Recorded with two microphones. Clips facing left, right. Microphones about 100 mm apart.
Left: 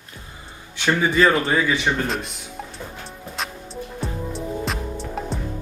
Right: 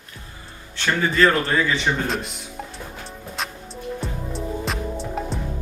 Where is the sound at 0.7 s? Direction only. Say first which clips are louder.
Left 1 dB; 15° left (ahead or behind).